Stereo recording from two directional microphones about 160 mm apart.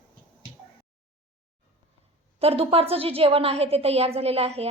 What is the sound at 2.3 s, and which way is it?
A woman's voice, 40° right (ahead or behind).